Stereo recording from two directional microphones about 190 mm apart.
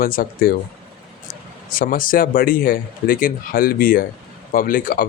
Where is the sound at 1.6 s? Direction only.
50° left (ahead or behind).